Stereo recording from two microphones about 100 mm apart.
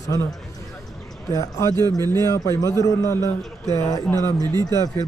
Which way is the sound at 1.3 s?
30° left (ahead or behind).